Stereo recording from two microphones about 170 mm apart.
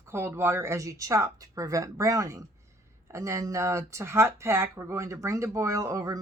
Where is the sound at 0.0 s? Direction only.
15° right (ahead or behind).